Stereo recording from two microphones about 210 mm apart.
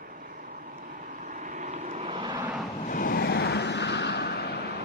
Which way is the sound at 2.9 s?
45° left (ahead or behind).